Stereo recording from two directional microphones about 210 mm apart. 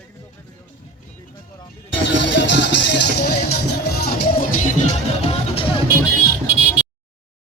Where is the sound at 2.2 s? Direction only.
60° left (ahead or behind); by 5.6 s 30° left (ahead or behind).